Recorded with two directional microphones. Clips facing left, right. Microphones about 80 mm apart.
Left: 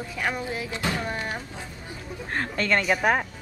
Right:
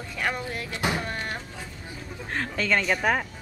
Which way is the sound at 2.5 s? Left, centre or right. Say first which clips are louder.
Left 1 dB; centre.